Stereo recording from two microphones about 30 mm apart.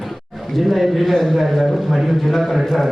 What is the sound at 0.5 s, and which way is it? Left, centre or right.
A man's voice, centre.